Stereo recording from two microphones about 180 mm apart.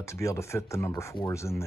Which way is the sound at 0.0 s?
15° left (ahead or behind).